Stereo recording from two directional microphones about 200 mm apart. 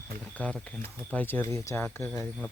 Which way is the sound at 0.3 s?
5° left (ahead or behind).